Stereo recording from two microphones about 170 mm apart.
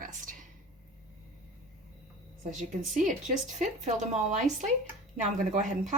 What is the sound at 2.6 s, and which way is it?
Speech, 50° right (ahead or behind).